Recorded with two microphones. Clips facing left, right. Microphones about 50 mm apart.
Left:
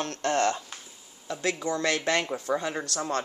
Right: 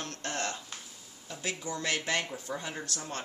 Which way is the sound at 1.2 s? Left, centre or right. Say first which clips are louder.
Left 8 dB; left.